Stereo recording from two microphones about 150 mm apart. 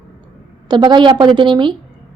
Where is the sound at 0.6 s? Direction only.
30° right (ahead or behind).